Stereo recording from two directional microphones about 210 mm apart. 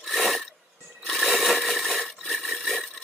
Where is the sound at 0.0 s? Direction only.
Centre (ahead or behind).